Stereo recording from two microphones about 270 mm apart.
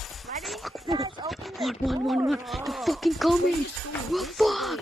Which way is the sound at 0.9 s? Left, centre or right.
Centre.